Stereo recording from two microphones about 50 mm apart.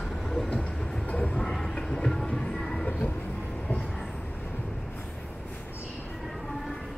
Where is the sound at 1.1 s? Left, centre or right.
Left.